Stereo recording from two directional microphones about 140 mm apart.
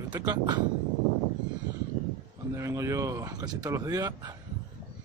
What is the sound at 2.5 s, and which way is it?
Speech, 20° right (ahead or behind).